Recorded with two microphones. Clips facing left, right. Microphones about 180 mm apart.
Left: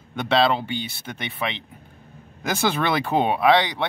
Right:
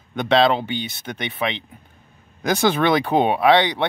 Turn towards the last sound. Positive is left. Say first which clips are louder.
# right 2 dB
turn(degrees=0)  # may be behind; listen again after turning